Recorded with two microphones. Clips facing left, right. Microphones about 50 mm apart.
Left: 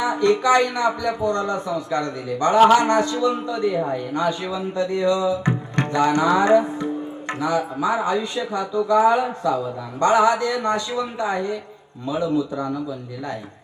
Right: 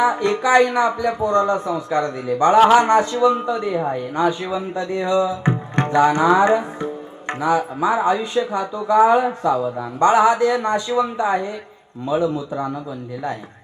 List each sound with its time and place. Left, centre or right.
0.0 s speech: right